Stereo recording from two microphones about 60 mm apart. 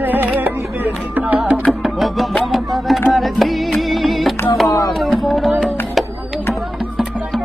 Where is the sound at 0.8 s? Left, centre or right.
Right.